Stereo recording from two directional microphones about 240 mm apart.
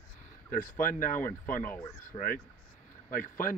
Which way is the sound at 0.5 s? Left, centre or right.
Left.